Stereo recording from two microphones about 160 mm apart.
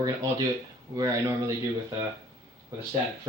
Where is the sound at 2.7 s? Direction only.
20° right (ahead or behind).